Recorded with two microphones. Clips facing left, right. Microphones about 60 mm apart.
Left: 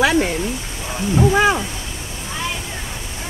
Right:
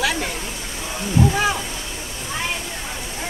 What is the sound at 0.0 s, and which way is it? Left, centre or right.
Speech, left.